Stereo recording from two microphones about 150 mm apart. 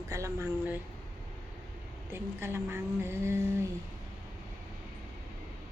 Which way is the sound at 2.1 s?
15° right (ahead or behind).